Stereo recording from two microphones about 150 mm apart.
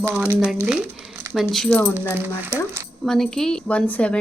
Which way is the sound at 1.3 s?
Centre (ahead or behind).